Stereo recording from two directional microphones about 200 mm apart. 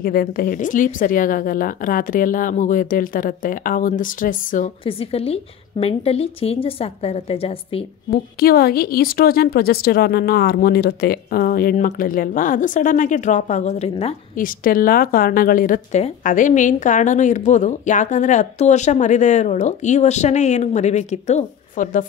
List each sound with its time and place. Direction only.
0.0 s a woman's voice: 50° left (ahead or behind)
4.8 s a woman's voice: 30° left (ahead or behind)
8.1 s a woman's voice: 50° left (ahead or behind); by 14.1 s 30° left (ahead or behind)
14.3 s a woman's voice: 45° left (ahead or behind)